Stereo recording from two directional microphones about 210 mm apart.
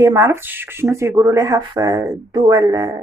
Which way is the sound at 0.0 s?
15° right (ahead or behind).